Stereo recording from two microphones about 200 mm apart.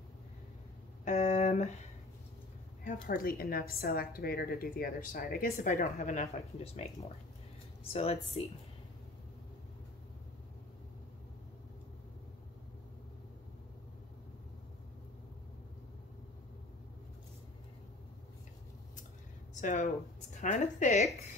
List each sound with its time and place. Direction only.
1.0 s a sound: 35° left (ahead or behind)
2.8 s a woman's voice: 40° left (ahead or behind)
19.5 s speech: 35° left (ahead or behind)